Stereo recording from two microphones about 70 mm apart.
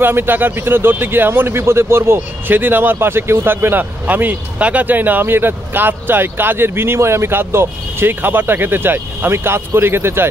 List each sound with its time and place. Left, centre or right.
0.0 s speech: right